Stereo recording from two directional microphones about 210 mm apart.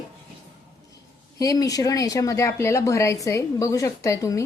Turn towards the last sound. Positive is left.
turn(degrees=15)  # may be behind; listen again after turning